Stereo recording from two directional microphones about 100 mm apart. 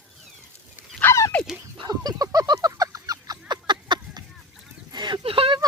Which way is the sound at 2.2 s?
40° right (ahead or behind).